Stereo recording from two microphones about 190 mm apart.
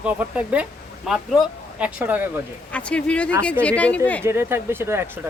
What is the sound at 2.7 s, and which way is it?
Speech, 5° left (ahead or behind).